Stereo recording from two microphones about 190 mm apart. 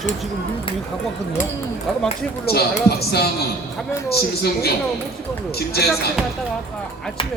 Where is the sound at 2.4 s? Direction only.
55° left (ahead or behind).